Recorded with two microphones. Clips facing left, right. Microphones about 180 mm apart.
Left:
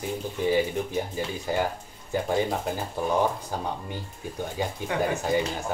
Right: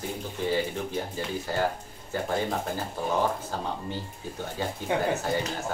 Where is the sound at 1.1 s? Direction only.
15° left (ahead or behind).